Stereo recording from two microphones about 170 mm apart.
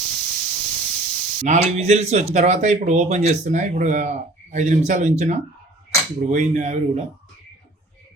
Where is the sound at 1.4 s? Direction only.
45° right (ahead or behind).